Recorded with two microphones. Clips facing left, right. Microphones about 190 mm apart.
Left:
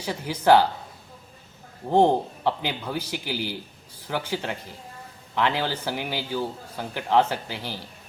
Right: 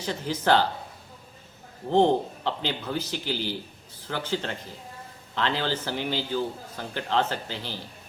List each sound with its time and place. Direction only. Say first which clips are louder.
0.0 s a man's voice: left 3 dB; 10° left (ahead or behind)
1.9 s a man's voice: left 1 dB; 10° left (ahead or behind)